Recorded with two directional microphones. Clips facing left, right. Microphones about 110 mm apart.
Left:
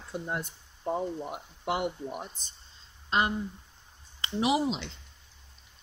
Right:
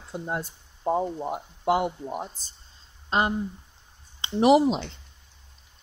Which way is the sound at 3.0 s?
30° right (ahead or behind).